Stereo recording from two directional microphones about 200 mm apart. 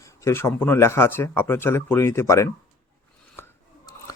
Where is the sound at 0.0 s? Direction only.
15° left (ahead or behind).